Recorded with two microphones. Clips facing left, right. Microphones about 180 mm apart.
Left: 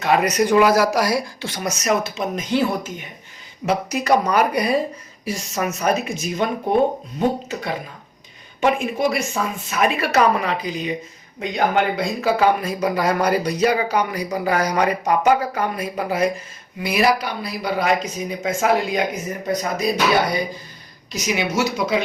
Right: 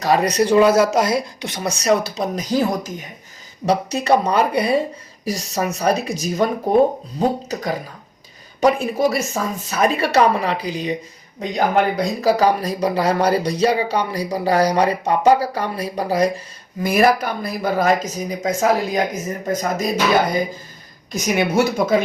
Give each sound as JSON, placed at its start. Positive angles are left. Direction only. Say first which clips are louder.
{"t": 0.0, "sound": "speech", "louder": "right 1 dB", "side_deg": -35}
{"t": 3.7, "sound": "speech", "louder": "right 2 dB", "side_deg": -30}
{"t": 16.8, "sound": "speech", "louder": "right 3 dB", "side_deg": -50}